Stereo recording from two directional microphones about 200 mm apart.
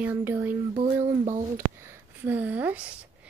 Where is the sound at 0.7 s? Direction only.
35° right (ahead or behind).